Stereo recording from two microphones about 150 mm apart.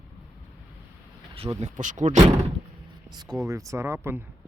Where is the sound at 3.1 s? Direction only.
25° right (ahead or behind).